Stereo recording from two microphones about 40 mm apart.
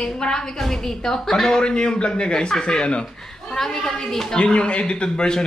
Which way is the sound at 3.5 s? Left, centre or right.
Centre.